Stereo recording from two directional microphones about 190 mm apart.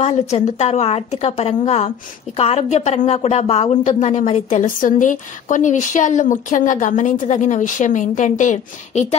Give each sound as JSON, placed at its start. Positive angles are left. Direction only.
{"t": 0.0, "sound": "a woman's voice", "side_deg": 35}